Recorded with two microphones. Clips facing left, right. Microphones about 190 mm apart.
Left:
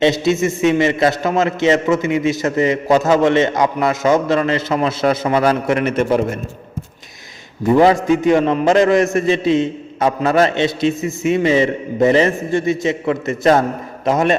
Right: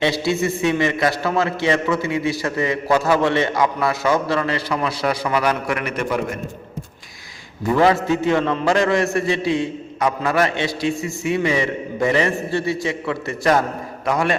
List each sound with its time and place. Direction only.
0.0 s a man's voice: 20° left (ahead or behind)
7.7 s a man's voice: 20° left (ahead or behind)